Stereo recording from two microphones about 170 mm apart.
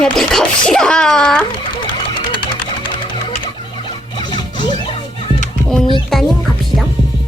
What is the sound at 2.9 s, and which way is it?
Sewing machine, 30° left (ahead or behind).